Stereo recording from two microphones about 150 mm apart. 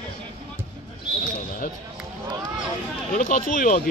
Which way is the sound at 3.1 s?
60° left (ahead or behind).